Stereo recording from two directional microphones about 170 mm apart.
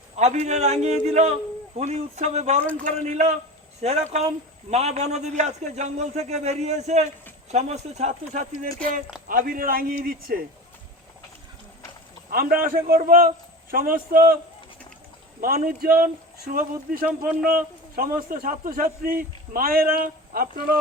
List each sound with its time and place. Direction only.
0.2 s a man's voice: 40° right (ahead or behind); by 10.4 s 60° right (ahead or behind)
12.3 s a man's voice: 60° right (ahead or behind)
15.4 s a man's voice: 55° right (ahead or behind)